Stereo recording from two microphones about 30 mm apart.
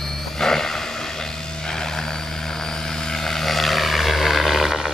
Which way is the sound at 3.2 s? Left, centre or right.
Centre.